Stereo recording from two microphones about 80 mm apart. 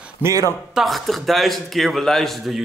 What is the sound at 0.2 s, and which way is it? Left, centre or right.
Speech, right.